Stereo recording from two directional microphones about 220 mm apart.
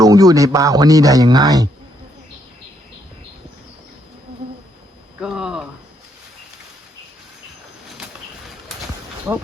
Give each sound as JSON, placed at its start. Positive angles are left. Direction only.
{"t": 0.0, "sound": "speech", "side_deg": -15}
{"t": 5.2, "sound": "a sound", "side_deg": -5}
{"t": 9.3, "sound": "speech", "side_deg": -10}